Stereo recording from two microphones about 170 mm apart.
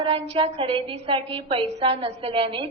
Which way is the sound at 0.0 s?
30° right (ahead or behind).